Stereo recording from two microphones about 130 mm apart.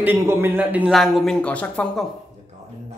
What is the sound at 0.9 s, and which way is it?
Speech, centre (ahead or behind).